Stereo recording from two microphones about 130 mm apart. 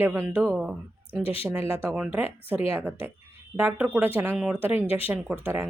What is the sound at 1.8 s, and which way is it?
Speech, 10° right (ahead or behind).